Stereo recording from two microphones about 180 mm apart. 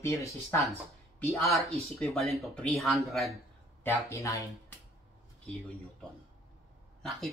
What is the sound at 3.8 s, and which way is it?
Speech, 15° left (ahead or behind).